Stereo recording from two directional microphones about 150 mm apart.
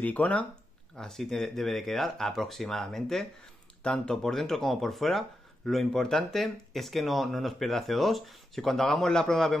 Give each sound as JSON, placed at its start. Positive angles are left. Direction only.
{"t": 0.0, "sound": "speech", "side_deg": 10}